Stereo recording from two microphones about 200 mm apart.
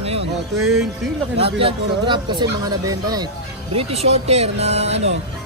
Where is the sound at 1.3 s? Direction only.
30° right (ahead or behind).